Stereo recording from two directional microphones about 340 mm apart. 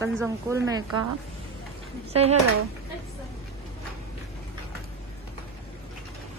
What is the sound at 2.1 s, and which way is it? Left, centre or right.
Speech, centre.